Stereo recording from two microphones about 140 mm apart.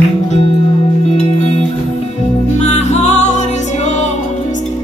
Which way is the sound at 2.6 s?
55° left (ahead or behind).